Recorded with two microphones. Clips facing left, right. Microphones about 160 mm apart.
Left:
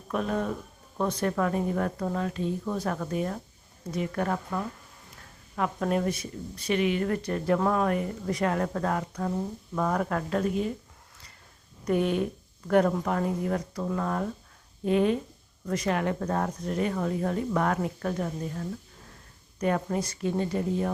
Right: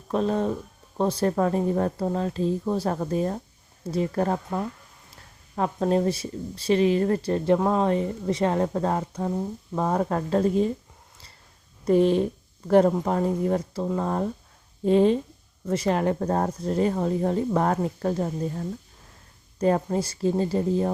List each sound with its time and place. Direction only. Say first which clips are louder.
0.1 s speech: right 5 dB; 30° right (ahead or behind)
11.9 s speech: right 6 dB; 30° right (ahead or behind)